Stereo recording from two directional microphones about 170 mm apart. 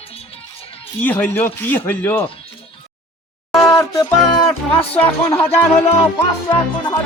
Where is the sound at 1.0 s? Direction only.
10° left (ahead or behind).